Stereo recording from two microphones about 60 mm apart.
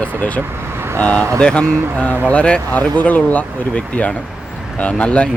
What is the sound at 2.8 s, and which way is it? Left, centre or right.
Speech, left.